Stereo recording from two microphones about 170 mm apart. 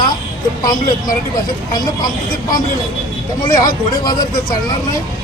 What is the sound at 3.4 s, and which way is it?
Speech, 25° left (ahead or behind).